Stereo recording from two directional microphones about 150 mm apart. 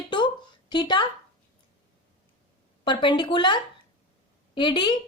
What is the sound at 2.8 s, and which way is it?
A woman's voice, 35° left (ahead or behind).